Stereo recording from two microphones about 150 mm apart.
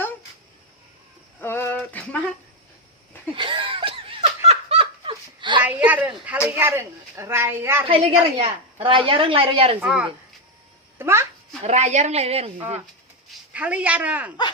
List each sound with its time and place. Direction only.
1.4 s a sound: 15° left (ahead or behind)
3.3 s laughter: 35° right (ahead or behind)
5.6 s speech: 10° right (ahead or behind)
7.9 s a woman's voice: 35° right (ahead or behind)
9.8 s speech: 5° right (ahead or behind)
10.9 s a sound: 15° right (ahead or behind)
11.6 s a woman's voice: 50° right (ahead or behind)
13.5 s speech: 10° right (ahead or behind)